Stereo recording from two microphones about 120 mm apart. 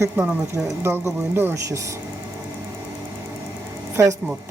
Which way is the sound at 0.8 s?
20° right (ahead or behind).